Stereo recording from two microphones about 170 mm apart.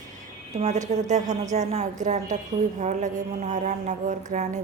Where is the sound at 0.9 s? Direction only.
40° right (ahead or behind).